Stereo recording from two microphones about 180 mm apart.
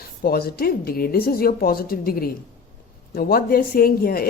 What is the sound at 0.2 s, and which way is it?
A woman's voice, 55° left (ahead or behind).